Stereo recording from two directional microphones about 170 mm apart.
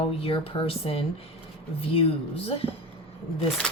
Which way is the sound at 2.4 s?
35° left (ahead or behind).